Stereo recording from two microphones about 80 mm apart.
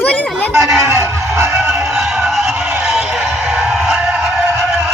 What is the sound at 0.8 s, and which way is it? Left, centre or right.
Music, right.